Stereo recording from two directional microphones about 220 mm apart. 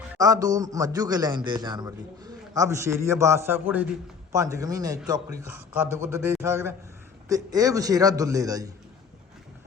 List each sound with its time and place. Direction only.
0.1 s a man's voice: 15° right (ahead or behind)